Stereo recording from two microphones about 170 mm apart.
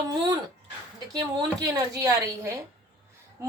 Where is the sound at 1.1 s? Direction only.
25° right (ahead or behind).